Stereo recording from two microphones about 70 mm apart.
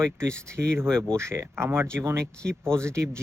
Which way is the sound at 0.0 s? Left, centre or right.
Right.